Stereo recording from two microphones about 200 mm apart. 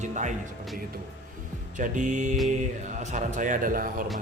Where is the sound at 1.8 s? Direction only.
40° right (ahead or behind).